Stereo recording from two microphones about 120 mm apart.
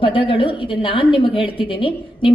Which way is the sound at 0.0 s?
45° left (ahead or behind).